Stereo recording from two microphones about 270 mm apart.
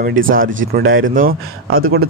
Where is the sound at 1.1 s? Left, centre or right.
Right.